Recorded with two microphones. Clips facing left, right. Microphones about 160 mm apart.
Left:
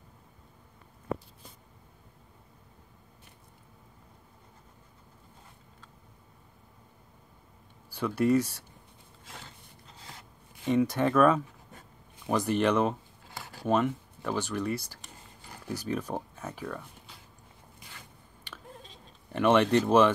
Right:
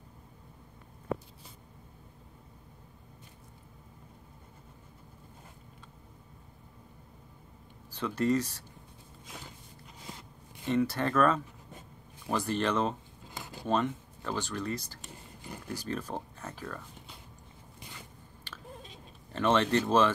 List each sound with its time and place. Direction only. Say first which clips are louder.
7.9 s speech: left 3 dB; 10° left (ahead or behind)
10.6 s speech: left 3 dB; 10° left (ahead or behind)
13.3 s a sound: even; 20° right (ahead or behind)
13.7 s speech: left 3 dB; 10° left (ahead or behind)
15.8 s speech: left 4 dB; 10° left (ahead or behind)
19.3 s speech: left 4 dB; 15° left (ahead or behind)